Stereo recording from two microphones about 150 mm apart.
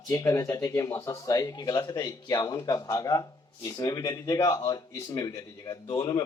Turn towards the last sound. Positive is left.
turn(degrees=20)  # may be behind; listen again after turning